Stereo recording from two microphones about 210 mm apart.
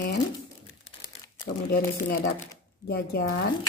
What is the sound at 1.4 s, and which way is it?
Speech, 40° left (ahead or behind).